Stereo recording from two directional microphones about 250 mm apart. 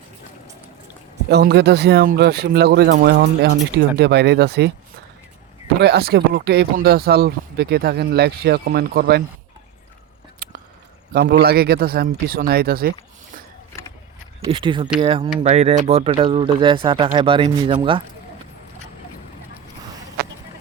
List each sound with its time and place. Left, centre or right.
1.3 s speech: right
5.8 s speech: right
10.4 s whispering: right
11.1 s speech: right
14.4 s speech: centre